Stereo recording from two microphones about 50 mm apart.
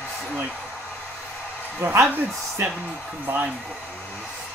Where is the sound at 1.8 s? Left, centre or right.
Right.